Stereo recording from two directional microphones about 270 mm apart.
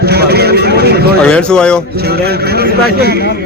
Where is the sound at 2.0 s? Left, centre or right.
Right.